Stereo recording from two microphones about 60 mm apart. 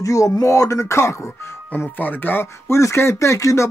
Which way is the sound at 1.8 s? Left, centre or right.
Left.